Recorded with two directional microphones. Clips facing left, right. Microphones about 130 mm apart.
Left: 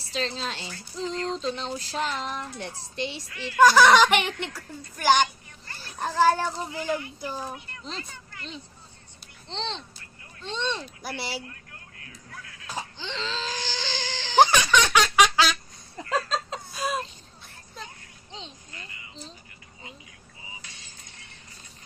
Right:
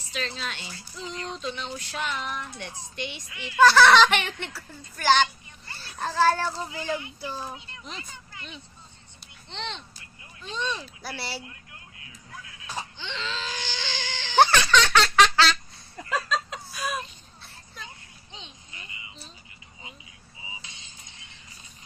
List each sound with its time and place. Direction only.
0.0 s speech: 30° left (ahead or behind)
3.6 s speech: 15° left (ahead or behind)
7.5 s speech: 15° right (ahead or behind)
9.5 s speech: 30° left (ahead or behind)
13.0 s wail: 35° left (ahead or behind)
14.3 s baby laughter: 15° left (ahead or behind)
16.0 s a sound: 30° left (ahead or behind)
18.3 s a sound: 35° left (ahead or behind)